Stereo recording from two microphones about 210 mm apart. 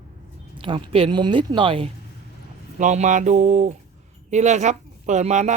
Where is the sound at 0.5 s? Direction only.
25° right (ahead or behind).